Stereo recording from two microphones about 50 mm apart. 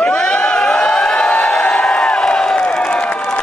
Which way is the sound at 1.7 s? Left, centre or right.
Centre.